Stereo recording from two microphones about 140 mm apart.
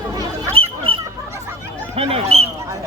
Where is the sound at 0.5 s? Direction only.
40° right (ahead or behind).